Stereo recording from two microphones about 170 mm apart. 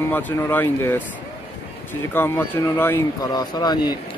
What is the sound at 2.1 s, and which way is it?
Speech, 10° left (ahead or behind).